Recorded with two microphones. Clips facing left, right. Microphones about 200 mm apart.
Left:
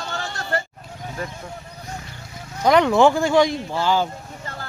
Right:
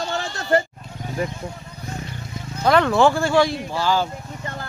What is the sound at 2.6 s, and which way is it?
Speech, 15° left (ahead or behind).